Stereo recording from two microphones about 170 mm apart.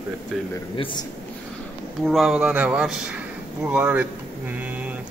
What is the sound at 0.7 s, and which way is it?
Speech, 30° left (ahead or behind).